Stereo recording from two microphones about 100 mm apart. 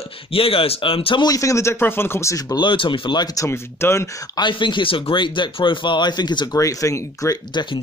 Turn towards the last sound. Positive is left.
turn(degrees=50)  # may be behind; listen again after turning